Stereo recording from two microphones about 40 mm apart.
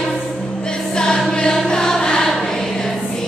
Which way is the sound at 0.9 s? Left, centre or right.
Centre.